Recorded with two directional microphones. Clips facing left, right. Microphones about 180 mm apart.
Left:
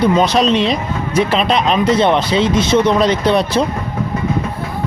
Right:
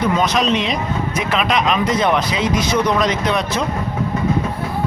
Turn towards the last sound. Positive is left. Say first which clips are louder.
# left 5 dB
turn(degrees=30)  # may be behind; listen again after turning